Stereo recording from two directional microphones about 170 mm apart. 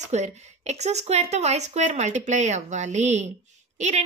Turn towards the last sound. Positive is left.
turn(degrees=-40)  # may be behind; listen again after turning